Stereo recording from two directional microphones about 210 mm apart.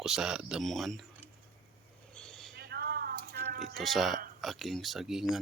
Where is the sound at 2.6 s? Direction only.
50° right (ahead or behind).